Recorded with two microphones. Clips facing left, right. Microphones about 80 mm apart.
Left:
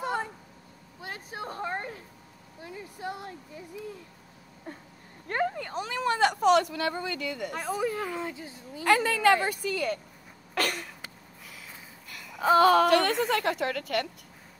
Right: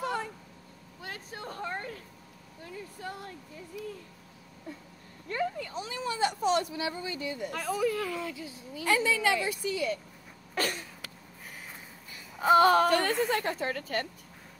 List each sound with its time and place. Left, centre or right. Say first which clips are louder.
0.0 s a sound: left 2 dB; left
1.0 s a sound: left 3 dB; centre
3.8 s speech: even; left
5.3 s speech: left 3 dB; left
7.5 s speech: right 1 dB; left
8.5 s speech: left 4 dB; left
10.5 s a sound: left 2 dB; left
12.1 s babbling: left 6 dB; left
12.8 s a woman's voice: left 3 dB; left